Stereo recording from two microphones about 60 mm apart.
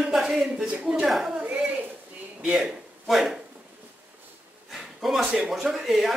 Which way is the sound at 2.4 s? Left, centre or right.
Centre.